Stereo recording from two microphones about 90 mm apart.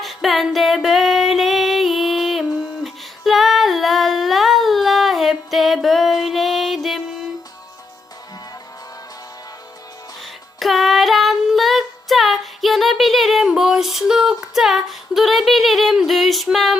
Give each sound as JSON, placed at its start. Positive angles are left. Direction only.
{"t": 0.0, "sound": "music", "side_deg": 0}
{"t": 10.6, "sound": "child singing", "side_deg": 0}